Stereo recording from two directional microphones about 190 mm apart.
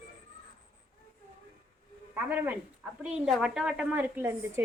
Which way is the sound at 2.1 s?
10° right (ahead or behind).